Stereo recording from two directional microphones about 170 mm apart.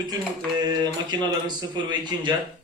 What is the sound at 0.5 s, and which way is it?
Speech, 25° right (ahead or behind).